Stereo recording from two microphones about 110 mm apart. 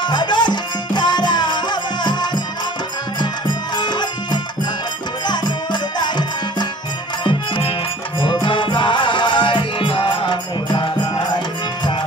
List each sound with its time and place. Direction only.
0.0 s music: 40° left (ahead or behind)